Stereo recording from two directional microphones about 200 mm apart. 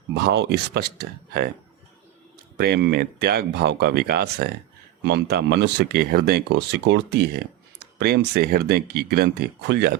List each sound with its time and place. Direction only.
0.1 s speech: 55° right (ahead or behind)
2.6 s speech: 55° right (ahead or behind)